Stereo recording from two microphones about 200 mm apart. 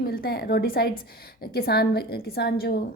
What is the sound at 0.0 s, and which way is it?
A woman's voice, 50° left (ahead or behind).